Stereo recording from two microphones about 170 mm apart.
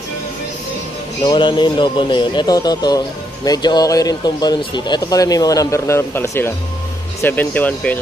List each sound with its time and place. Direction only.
1.2 s a man's voice: 25° left (ahead or behind); by 8.0 s 10° left (ahead or behind)